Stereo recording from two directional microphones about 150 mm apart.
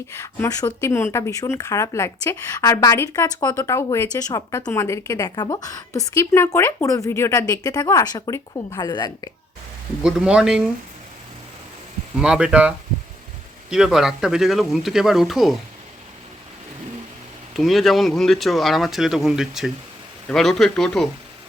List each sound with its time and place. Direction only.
0.2 s speech: 20° left (ahead or behind)
10.0 s speech: 5° right (ahead or behind)
12.1 s speech: 5° right (ahead or behind)
17.6 s speech: centre (ahead or behind)